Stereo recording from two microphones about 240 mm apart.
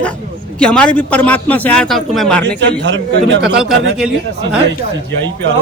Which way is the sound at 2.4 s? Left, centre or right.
Right.